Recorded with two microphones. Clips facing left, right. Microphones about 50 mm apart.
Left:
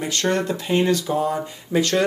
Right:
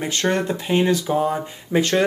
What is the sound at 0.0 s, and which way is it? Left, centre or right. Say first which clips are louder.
Speech: right 1 dB; right.